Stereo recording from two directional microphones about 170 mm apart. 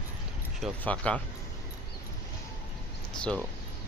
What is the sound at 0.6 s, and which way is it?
Speech, 5° left (ahead or behind).